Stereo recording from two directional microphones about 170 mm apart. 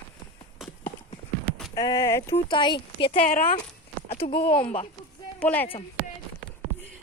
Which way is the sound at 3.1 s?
55° left (ahead or behind).